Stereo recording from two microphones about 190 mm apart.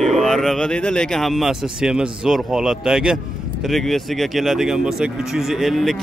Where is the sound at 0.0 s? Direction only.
Centre (ahead or behind).